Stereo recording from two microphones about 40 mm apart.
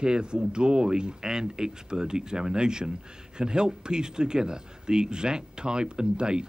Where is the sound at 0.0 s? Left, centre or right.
Right.